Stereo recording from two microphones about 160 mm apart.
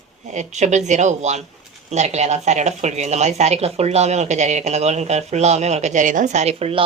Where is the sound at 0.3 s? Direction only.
45° right (ahead or behind).